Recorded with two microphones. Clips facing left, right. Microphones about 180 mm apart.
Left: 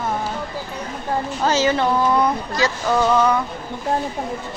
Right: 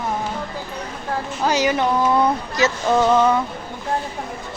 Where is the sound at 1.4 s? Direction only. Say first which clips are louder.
Even; 15° right (ahead or behind).